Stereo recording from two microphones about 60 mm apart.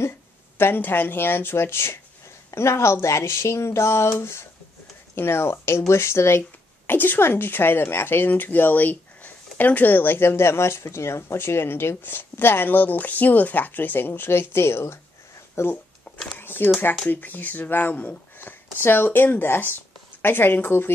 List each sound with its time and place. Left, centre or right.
0.6 s a woman's voice: left
6.9 s a woman's voice: left
16.3 s a sound: left
17.1 s a woman's voice: left
18.8 s a woman's voice: left